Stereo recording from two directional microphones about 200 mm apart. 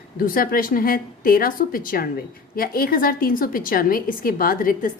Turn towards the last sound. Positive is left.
turn(degrees=45)  # may be behind; listen again after turning